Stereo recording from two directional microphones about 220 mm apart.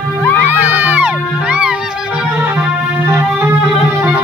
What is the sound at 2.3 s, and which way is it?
Music, 10° right (ahead or behind).